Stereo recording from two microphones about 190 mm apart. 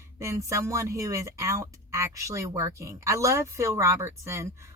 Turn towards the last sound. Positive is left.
turn(degrees=-15)  # may be behind; listen again after turning